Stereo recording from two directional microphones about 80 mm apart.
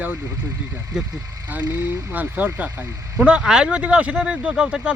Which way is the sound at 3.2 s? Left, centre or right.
Centre.